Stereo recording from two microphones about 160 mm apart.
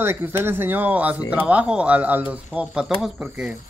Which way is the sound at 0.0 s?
15° right (ahead or behind).